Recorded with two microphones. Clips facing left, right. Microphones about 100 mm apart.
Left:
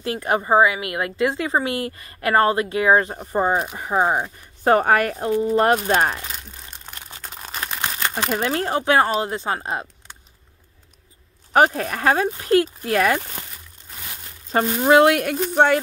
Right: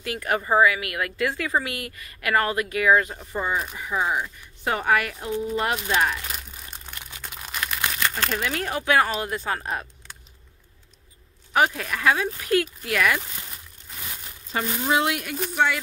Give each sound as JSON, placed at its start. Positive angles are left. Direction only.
{"t": 0.0, "sound": "speech", "side_deg": 25}
{"t": 3.2, "sound": "speech", "side_deg": 40}
{"t": 7.0, "sound": "crumpling", "side_deg": 35}
{"t": 8.3, "sound": "speech", "side_deg": 35}
{"t": 11.5, "sound": "speech", "side_deg": 40}
{"t": 14.5, "sound": "speech", "side_deg": 50}